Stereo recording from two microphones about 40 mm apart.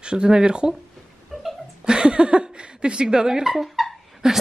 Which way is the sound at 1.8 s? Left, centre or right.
Centre.